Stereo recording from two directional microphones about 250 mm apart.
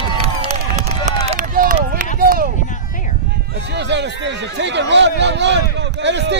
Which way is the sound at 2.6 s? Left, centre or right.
Left.